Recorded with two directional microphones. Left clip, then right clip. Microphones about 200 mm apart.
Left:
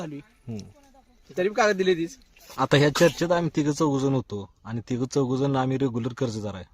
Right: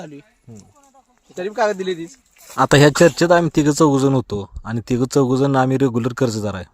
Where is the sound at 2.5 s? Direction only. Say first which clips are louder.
Right 8 dB; 45° right (ahead or behind).